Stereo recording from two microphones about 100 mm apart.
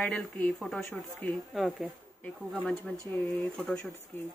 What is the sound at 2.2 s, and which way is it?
Speech, 10° left (ahead or behind).